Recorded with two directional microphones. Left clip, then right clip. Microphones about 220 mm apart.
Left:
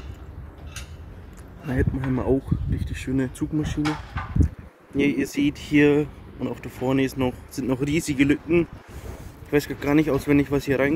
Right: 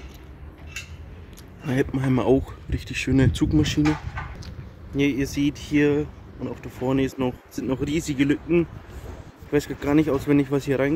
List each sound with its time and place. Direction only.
1.7 s speech: 30° right (ahead or behind)
4.9 s speech: 5° left (ahead or behind)
5.8 s speech: 15° left (ahead or behind)
6.8 s speech: centre (ahead or behind)